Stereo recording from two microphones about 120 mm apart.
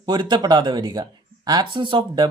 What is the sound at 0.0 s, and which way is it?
Speech, 40° right (ahead or behind).